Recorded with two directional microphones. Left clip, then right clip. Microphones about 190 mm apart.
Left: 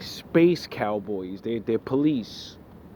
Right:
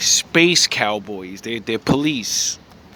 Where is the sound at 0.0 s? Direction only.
10° right (ahead or behind).